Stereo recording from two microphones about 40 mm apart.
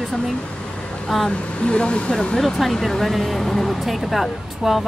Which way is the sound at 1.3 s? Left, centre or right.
Left.